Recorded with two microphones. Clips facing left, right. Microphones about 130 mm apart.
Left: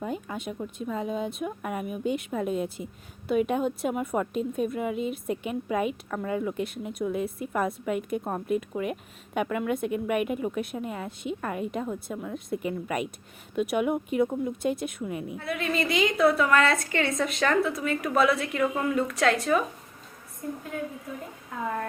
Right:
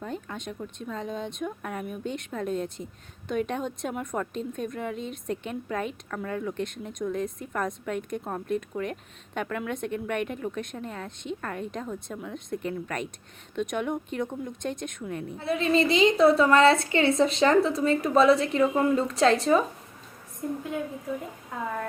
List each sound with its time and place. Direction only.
0.0 s a woman's voice: 5° left (ahead or behind)
15.4 s a woman's voice: 30° right (ahead or behind)